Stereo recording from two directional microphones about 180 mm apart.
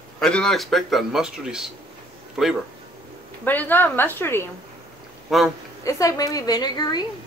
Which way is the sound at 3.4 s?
10° left (ahead or behind).